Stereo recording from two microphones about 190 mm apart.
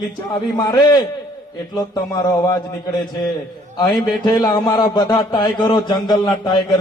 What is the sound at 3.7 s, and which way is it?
A man's voice, 20° left (ahead or behind).